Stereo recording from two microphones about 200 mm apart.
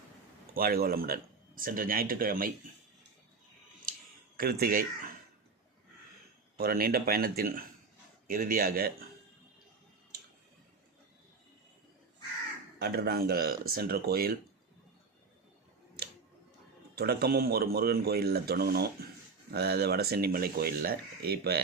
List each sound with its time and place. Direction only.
0.5 s speech: 50° right (ahead or behind)
4.4 s speech: 45° right (ahead or behind)
6.6 s speech: 50° right (ahead or behind)
12.8 s speech: 50° right (ahead or behind)
16.9 s speech: 50° right (ahead or behind)